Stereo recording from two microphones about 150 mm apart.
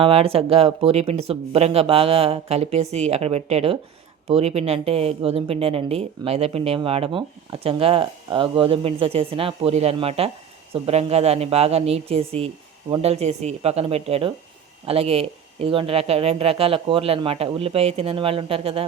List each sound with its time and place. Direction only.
0.0 s speech: 40° right (ahead or behind)